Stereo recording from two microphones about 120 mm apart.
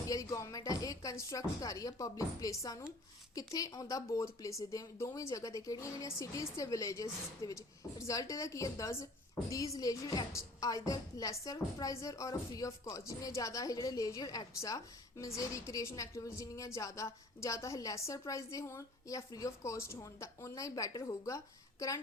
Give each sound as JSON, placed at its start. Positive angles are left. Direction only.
{"t": 0.1, "sound": "a woman's voice", "side_deg": 30}